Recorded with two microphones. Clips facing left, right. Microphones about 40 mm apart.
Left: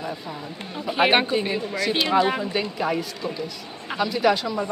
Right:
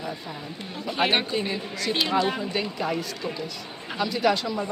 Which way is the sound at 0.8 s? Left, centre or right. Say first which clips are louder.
Left 5 dB; centre.